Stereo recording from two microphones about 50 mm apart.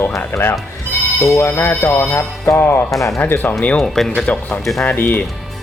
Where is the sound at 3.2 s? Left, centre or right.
Left.